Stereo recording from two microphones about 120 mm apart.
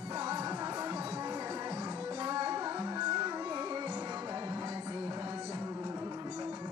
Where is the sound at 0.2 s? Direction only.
30° right (ahead or behind).